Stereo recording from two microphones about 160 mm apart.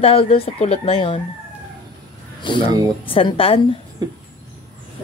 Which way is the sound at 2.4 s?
30° left (ahead or behind).